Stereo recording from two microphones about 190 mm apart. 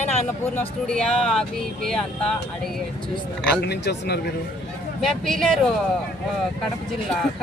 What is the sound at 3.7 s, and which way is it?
Speech, 60° left (ahead or behind).